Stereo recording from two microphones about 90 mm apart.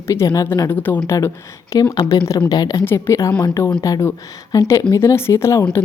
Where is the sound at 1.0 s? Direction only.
35° left (ahead or behind).